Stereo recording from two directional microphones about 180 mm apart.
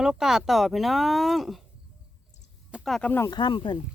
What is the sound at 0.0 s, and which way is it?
Speech, 5° right (ahead or behind).